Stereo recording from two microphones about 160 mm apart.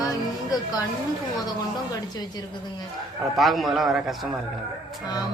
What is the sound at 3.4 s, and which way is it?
Speech, centre (ahead or behind).